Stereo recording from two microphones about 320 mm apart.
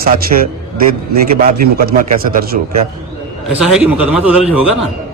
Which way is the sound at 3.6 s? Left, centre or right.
Centre.